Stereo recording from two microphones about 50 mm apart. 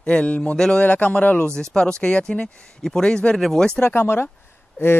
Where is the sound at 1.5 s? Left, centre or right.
Centre.